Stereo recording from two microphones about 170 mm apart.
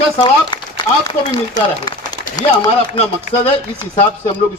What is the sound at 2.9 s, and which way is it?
Speech, 35° left (ahead or behind).